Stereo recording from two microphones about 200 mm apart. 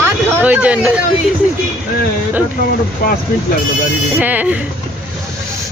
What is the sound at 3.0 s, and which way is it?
Speech, 45° left (ahead or behind).